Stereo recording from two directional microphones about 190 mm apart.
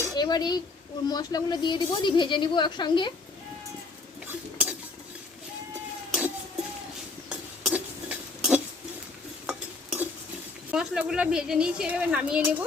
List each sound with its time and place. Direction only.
0.1 s a sound: 20° left (ahead or behind)
1.0 s speech: 20° left (ahead or behind)
4.3 s cutlery: 5° right (ahead or behind)
7.3 s cutlery: 5° right (ahead or behind)
9.5 s stir: 5° right (ahead or behind)
10.7 s speech: 5° right (ahead or behind)